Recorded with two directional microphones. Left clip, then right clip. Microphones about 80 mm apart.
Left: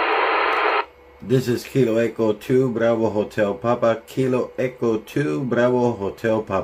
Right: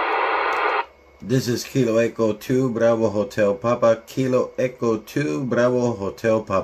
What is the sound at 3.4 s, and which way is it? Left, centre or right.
Speech, right.